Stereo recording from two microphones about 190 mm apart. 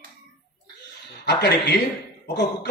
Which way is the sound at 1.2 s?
60° left (ahead or behind).